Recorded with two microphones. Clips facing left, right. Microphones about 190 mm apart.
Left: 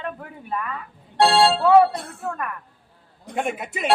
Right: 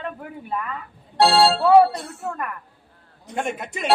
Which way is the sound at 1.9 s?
55° left (ahead or behind).